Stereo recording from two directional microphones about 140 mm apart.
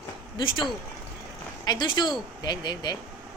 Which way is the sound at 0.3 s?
35° left (ahead or behind).